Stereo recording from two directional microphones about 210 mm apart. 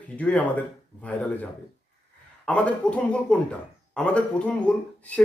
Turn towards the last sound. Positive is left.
turn(degrees=5)  # may be behind; listen again after turning